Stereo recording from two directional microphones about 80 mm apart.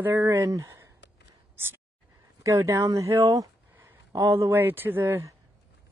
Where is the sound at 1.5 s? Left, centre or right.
Right.